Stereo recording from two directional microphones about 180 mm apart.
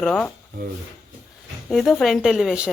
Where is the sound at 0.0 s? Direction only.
5° left (ahead or behind).